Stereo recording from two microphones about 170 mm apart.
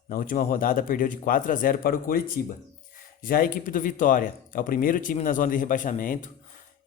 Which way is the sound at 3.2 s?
55° left (ahead or behind).